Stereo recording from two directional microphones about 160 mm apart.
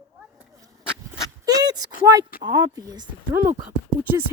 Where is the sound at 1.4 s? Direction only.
25° right (ahead or behind).